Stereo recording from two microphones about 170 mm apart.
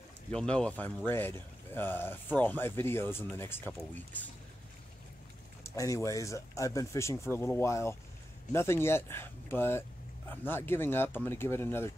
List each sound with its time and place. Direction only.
0.3 s speech: 5° left (ahead or behind)
5.6 s speech: 15° left (ahead or behind)